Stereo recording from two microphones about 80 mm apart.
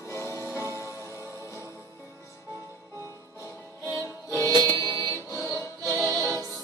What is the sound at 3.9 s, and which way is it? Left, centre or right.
Music, left.